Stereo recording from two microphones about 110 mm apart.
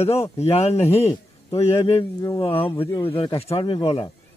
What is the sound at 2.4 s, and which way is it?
Speech, 55° left (ahead or behind).